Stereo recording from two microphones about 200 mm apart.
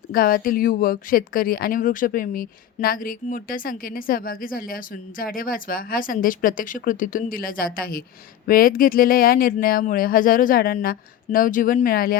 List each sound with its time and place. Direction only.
0.1 s speech: 45° left (ahead or behind)